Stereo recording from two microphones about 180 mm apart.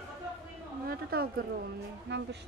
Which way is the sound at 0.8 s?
55° right (ahead or behind).